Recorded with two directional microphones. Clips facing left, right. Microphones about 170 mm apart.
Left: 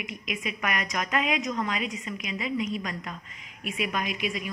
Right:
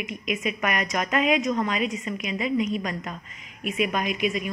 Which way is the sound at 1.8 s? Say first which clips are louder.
Right 6 dB; 45° right (ahead or behind).